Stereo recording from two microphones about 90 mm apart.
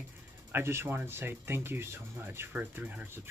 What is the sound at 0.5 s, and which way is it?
Speech, 25° right (ahead or behind).